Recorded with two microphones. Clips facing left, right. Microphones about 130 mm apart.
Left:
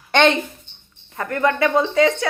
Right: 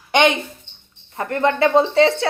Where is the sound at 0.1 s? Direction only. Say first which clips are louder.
Even; 15° right (ahead or behind).